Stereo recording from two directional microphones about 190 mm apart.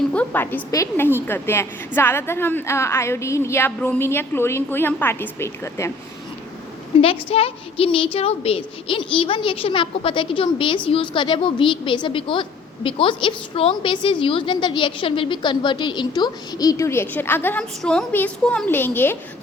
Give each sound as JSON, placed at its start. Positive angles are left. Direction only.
{"t": 0.1, "sound": "a woman's voice", "side_deg": 10}
{"t": 7.0, "sound": "a woman's voice", "side_deg": 30}